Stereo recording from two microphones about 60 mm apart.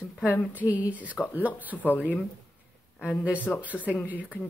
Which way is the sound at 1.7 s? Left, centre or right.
Left.